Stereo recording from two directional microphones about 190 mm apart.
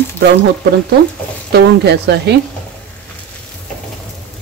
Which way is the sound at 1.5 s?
60° right (ahead or behind).